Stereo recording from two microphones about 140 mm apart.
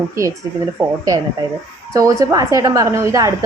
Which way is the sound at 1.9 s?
25° right (ahead or behind).